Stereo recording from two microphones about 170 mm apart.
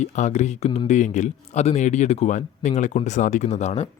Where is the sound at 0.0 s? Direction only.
45° left (ahead or behind).